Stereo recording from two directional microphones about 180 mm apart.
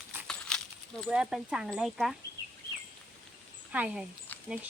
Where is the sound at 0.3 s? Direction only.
5° left (ahead or behind).